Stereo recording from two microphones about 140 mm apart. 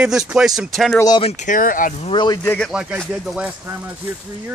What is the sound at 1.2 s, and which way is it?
Speech, 60° left (ahead or behind).